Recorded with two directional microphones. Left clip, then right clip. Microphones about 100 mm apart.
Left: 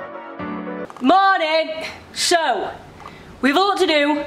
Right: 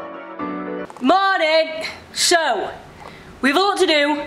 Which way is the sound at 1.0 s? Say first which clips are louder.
Left 1 dB; 5° right (ahead or behind).